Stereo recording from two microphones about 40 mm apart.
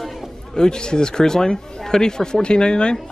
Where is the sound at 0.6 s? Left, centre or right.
Centre.